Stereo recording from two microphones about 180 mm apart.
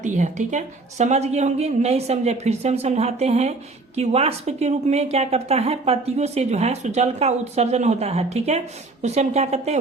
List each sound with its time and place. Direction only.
0.0 s speech: 45° right (ahead or behind)